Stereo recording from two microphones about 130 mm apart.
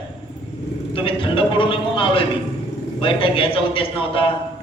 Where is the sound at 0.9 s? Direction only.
40° left (ahead or behind).